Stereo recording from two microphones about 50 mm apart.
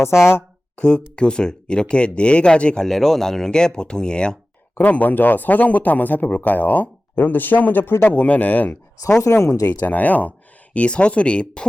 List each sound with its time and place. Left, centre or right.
0.0 s speech: left
0.8 s speech: centre
2.8 s speech: centre
4.7 s speech: left
9.2 s speech: left
9.6 s speech: left